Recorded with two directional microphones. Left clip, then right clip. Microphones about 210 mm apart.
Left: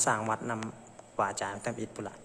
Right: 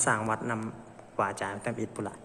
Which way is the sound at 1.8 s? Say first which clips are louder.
Right 3 dB; 5° left (ahead or behind).